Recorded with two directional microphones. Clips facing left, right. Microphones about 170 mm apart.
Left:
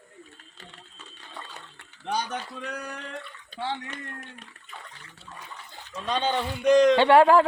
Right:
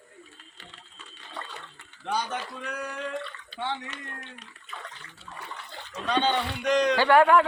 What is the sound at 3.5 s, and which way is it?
Speech, 50° left (ahead or behind).